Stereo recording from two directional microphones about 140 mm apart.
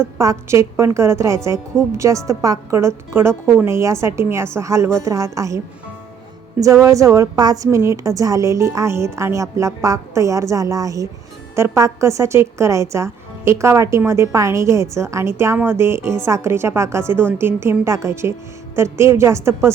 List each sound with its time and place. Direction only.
0.0 s a woman's voice: 20° right (ahead or behind)
6.6 s a woman's voice: 20° right (ahead or behind)